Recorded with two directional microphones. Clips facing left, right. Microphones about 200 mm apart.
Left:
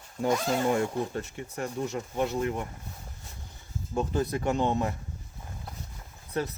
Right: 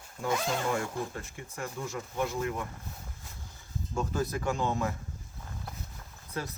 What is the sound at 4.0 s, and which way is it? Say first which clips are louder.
Speech: left 4 dB; 25° left (ahead or behind).